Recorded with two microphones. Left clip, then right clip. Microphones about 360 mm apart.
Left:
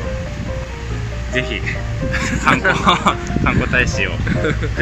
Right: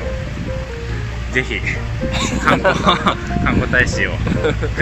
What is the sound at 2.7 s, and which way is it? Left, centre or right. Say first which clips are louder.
Speech: left 1 dB; centre.